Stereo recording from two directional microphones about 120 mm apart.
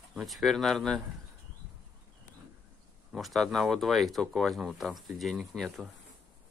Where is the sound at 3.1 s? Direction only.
Centre (ahead or behind).